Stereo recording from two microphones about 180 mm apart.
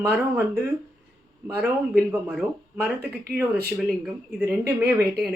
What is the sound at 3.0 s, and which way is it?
Speech, 60° right (ahead or behind).